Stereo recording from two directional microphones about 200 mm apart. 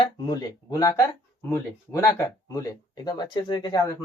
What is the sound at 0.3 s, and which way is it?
Speech, 20° left (ahead or behind).